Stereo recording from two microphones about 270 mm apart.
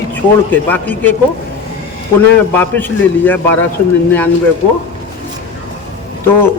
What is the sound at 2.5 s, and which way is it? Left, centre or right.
Speech, centre.